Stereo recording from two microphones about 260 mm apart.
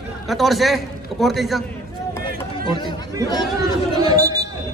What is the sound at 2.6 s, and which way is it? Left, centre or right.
Chatter, centre.